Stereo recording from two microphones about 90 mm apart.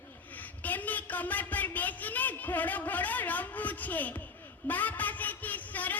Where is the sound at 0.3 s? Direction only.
20° left (ahead or behind).